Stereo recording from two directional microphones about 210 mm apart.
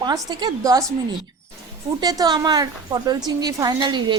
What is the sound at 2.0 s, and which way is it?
A woman's voice, 20° right (ahead or behind).